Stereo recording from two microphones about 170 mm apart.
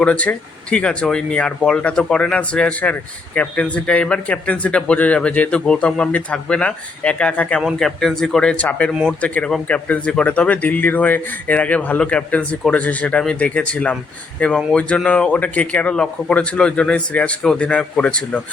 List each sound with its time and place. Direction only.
0.0 s speech: 10° left (ahead or behind)
8.9 s speech: centre (ahead or behind)